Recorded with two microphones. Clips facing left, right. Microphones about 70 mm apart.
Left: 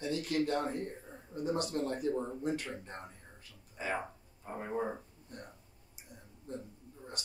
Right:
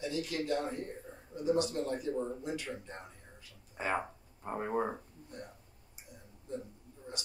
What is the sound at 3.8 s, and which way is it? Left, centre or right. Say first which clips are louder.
Speech: right 2 dB; right.